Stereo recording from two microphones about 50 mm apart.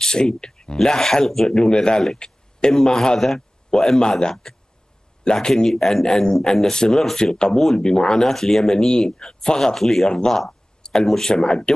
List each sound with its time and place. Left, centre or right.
0.0 s a man's voice: centre
9.6 s speech: centre